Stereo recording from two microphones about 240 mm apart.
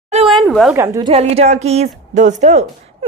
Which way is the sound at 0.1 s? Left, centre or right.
Right.